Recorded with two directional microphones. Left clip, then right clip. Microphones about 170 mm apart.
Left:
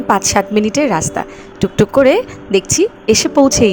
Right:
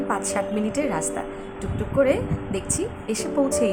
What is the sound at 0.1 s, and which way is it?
A woman's voice, 55° left (ahead or behind).